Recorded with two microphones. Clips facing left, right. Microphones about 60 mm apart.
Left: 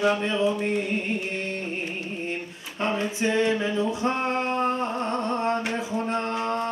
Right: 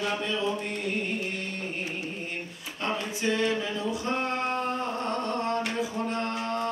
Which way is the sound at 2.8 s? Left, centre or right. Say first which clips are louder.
Left 5 dB; left.